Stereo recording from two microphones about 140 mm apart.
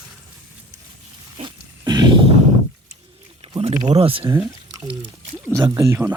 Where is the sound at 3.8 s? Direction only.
45° right (ahead or behind).